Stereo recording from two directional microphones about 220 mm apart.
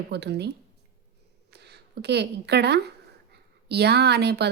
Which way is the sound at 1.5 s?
50° right (ahead or behind).